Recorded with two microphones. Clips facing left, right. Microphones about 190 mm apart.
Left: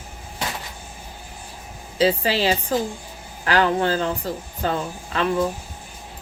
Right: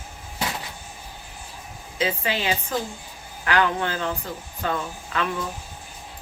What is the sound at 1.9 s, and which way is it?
Speech, 35° left (ahead or behind).